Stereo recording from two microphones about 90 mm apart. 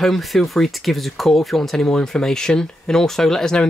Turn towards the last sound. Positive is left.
turn(degrees=5)  # may be behind; listen again after turning